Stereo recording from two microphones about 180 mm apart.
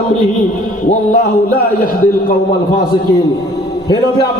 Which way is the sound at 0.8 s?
50° left (ahead or behind).